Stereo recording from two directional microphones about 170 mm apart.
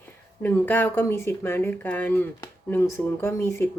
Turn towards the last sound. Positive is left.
turn(degrees=15)  # may be behind; listen again after turning